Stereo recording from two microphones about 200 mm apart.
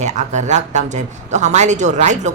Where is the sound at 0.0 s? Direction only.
35° right (ahead or behind).